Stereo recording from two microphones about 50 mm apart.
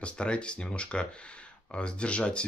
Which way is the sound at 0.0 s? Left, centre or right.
Left.